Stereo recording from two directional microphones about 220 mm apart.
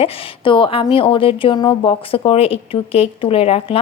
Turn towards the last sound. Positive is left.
turn(degrees=25)  # may be behind; listen again after turning